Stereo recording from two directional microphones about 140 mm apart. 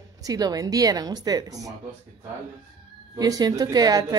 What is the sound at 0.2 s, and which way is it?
A woman's voice, 30° right (ahead or behind).